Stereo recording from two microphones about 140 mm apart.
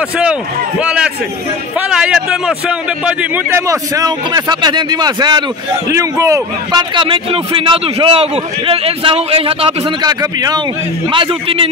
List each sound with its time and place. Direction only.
0.2 s a man's voice: 10° right (ahead or behind); by 9.8 s 40° right (ahead or behind)
10.0 s a man's voice: 30° right (ahead or behind)
11.1 s a man's voice: 40° right (ahead or behind)